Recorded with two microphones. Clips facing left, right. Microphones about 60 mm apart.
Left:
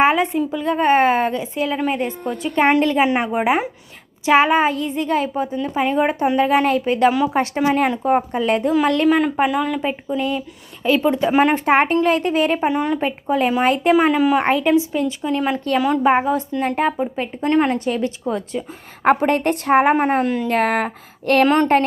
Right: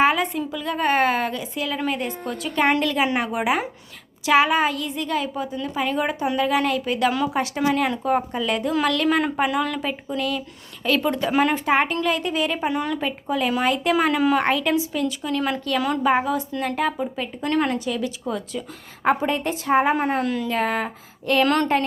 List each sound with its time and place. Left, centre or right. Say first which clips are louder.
0.0 s a woman's voice: left 4 dB; left
9.0 s a woman's voice: left 4 dB; centre; by 11.5 s left
11.5 s a woman's voice: left 5 dB; left
13.9 s a woman's voice: left 3 dB; left
17.7 s a woman's voice: left 4 dB; left
19.0 s a woman's voice: left 5 dB; left
20.5 s a woman's voice: left 5 dB; left
21.4 s a woman's voice: left 5 dB; left